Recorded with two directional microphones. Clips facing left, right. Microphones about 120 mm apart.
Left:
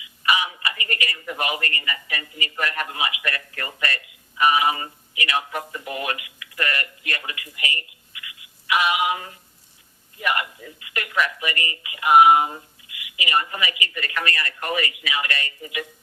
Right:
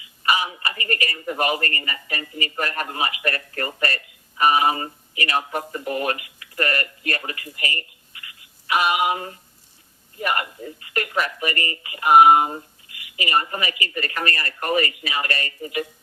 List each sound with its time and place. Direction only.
0.2 s a woman's voice: 35° right (ahead or behind)